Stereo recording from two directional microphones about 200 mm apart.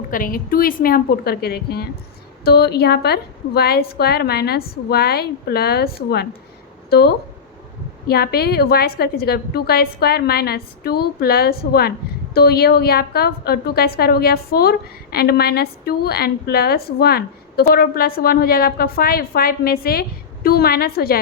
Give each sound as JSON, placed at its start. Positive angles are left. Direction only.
{"t": 0.1, "sound": "a woman's voice", "side_deg": 45}